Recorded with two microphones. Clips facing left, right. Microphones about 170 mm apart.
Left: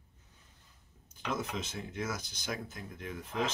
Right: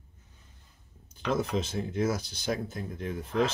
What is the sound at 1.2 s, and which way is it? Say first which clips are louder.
Speech: right 7 dB; 35° right (ahead or behind).